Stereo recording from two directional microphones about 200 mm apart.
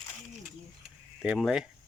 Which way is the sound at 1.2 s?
5° right (ahead or behind).